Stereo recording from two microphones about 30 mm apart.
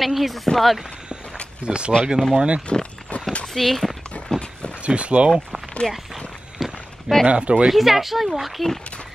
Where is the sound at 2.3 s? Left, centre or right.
Right.